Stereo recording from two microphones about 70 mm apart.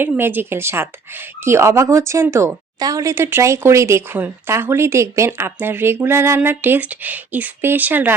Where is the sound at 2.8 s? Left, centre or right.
Right.